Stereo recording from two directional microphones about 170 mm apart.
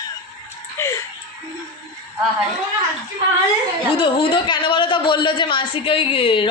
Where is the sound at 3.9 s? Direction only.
30° left (ahead or behind).